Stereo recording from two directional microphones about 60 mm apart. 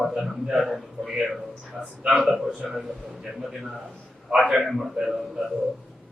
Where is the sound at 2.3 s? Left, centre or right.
Centre.